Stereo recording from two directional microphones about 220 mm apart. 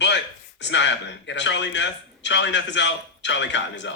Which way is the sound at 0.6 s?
55° left (ahead or behind).